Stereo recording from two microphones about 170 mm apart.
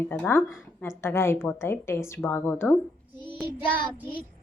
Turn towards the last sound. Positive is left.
turn(degrees=30)  # may be behind; listen again after turning